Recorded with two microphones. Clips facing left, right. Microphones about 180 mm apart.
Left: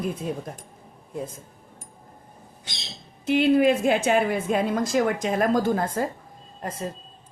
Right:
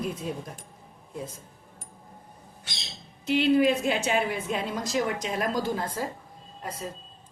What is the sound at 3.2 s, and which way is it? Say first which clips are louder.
A woman's voice: left 3 dB; 50° left (ahead or behind).